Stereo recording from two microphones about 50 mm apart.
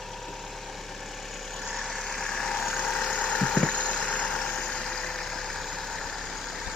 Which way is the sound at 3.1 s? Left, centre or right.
Centre.